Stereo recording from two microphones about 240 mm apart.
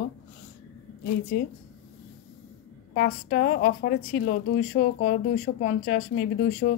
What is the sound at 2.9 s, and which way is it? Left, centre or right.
A woman's voice, left.